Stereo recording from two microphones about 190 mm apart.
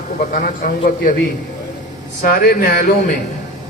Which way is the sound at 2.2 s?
50° left (ahead or behind).